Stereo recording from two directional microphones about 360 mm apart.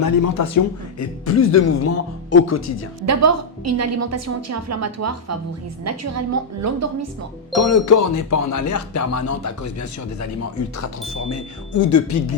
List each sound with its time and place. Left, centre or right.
0.0 s a man's voice: left
1.4 s speech: left
3.1 s a woman's voice: right
7.5 s speech: left
11.3 s speech: left